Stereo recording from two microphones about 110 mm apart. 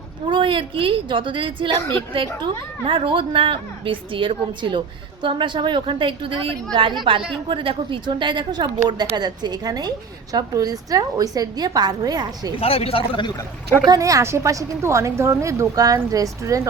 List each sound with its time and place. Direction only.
0.3 s a woman's voice: 50° right (ahead or behind)
12.5 s speech: 65° left (ahead or behind)
13.8 s a woman's voice: 35° right (ahead or behind)